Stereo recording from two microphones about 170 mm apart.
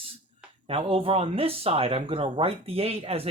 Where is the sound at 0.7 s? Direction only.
35° right (ahead or behind).